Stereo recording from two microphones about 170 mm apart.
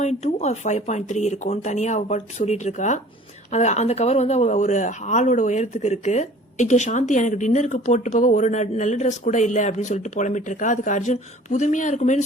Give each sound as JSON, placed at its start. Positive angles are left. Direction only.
{"t": 0.0, "sound": "speech", "side_deg": 40}